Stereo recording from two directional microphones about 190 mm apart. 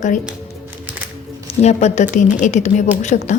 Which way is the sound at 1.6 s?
35° left (ahead or behind).